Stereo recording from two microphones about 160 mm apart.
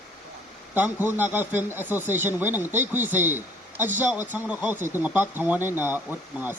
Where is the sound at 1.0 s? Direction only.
10° right (ahead or behind).